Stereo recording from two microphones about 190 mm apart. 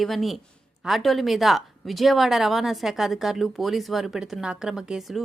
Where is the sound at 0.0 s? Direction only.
Centre (ahead or behind).